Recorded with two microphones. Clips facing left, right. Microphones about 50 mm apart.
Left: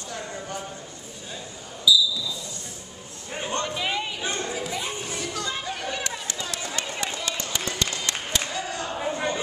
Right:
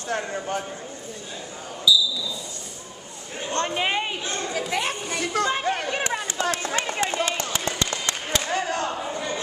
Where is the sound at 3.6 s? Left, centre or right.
Right.